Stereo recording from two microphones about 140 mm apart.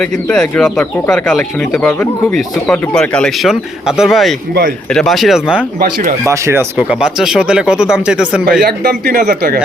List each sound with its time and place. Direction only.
0.0 s speech: 5° left (ahead or behind)
5.8 s speech: 90° right
6.2 s speech: 20° right (ahead or behind)
6.7 s speech: 5° right (ahead or behind)
8.9 s speech: 90° right